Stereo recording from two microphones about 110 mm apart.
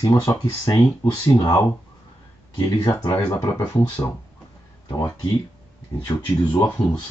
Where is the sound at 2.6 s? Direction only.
35° left (ahead or behind).